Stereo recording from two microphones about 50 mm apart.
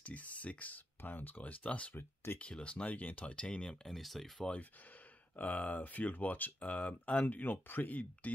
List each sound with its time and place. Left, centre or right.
0.0 s speech: left
3.8 s speech: centre
5.3 s speech: left